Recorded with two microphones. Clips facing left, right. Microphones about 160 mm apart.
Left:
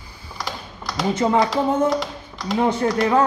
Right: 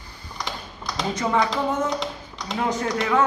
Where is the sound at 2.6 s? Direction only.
30° left (ahead or behind).